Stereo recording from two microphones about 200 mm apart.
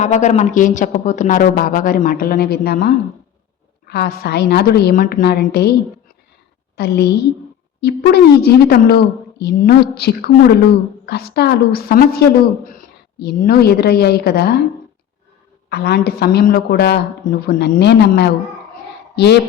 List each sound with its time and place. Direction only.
0.0 s a woman's voice: 35° left (ahead or behind); by 5.7 s 55° left (ahead or behind)
6.7 s a woman's voice: 55° left (ahead or behind)
15.7 s a woman's voice: 55° left (ahead or behind)